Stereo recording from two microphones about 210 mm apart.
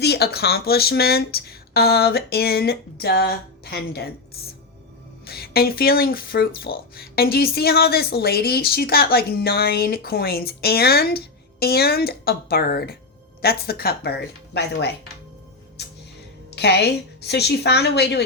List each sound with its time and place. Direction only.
0.0 s speech: 50° left (ahead or behind)
15.8 s music: 55° left (ahead or behind)
16.6 s speech: 55° left (ahead or behind)